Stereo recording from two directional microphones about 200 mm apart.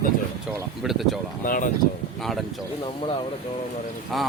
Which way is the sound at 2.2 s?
Centre (ahead or behind).